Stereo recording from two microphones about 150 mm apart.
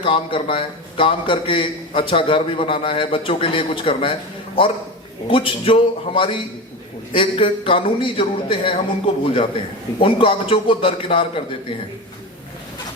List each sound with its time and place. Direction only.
0.0 s a man's voice: 35° left (ahead or behind)